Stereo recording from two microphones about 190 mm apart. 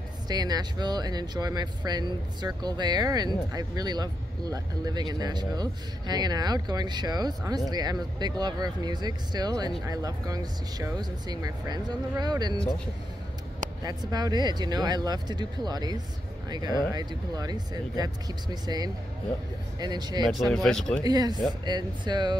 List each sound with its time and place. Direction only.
0.3 s speech: 20° right (ahead or behind)
13.8 s speech: 20° right (ahead or behind)
20.3 s speech: centre (ahead or behind)
21.0 s speech: 20° right (ahead or behind)